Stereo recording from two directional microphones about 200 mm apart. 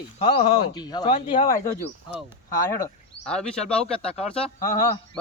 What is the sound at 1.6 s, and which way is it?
Speech, 15° left (ahead or behind).